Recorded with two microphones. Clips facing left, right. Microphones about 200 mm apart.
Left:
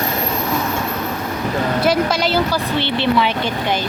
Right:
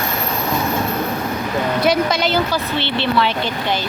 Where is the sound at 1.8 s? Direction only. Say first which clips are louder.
Even; 5° left (ahead or behind).